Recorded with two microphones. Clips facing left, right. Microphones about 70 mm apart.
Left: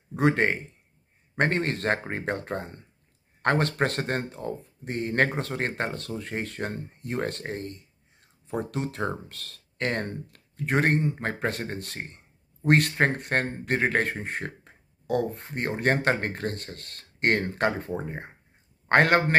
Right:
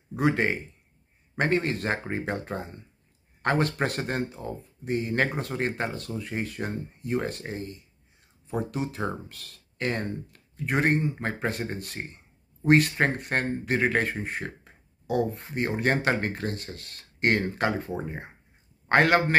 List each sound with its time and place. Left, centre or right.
0.1 s speech: left